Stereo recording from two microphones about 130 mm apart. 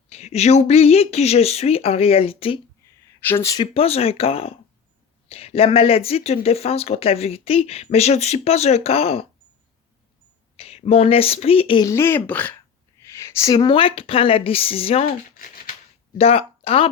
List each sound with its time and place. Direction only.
0.1 s speech: 55° left (ahead or behind)
2.8 s a sound: 15° left (ahead or behind)
3.6 s speech: 50° left (ahead or behind)
10.6 s speech: 50° left (ahead or behind)
11.8 s speech: 20° left (ahead or behind)
13.0 s a sound: 20° left (ahead or behind)
13.6 s speech: 40° left (ahead or behind)
16.1 s speech: 50° left (ahead or behind)